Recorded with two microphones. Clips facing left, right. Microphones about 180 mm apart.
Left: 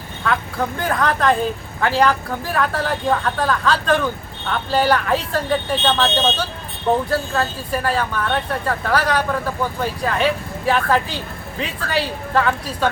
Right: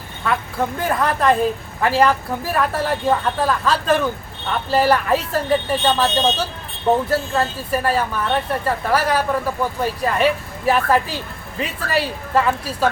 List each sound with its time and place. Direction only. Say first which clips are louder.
0.3 s speech: even; 5° right (ahead or behind)